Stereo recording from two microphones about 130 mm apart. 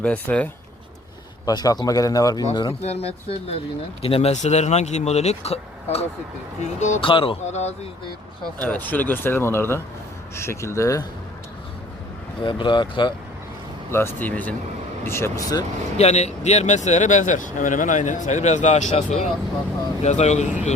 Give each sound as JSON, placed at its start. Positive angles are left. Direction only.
{"t": 0.0, "sound": "speech", "side_deg": 10}
{"t": 1.5, "sound": "speech", "side_deg": 30}
{"t": 2.8, "sound": "speech", "side_deg": 50}
{"t": 6.6, "sound": "speech", "side_deg": 65}
{"t": 7.0, "sound": "speech", "side_deg": 40}
{"t": 7.4, "sound": "speech", "side_deg": 60}
{"t": 8.6, "sound": "speech", "side_deg": 10}
{"t": 12.4, "sound": "speech", "side_deg": 40}
{"t": 13.9, "sound": "speech", "side_deg": 20}
{"t": 16.0, "sound": "speech", "side_deg": 55}